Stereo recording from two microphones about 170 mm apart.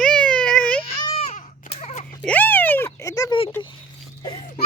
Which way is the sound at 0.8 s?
40° left (ahead or behind).